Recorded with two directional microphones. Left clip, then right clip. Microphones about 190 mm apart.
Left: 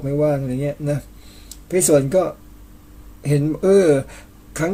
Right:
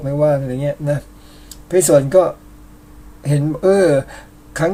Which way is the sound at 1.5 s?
20° left (ahead or behind).